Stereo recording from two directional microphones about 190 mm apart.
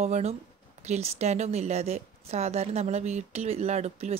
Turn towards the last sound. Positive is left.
turn(degrees=-35)  # may be behind; listen again after turning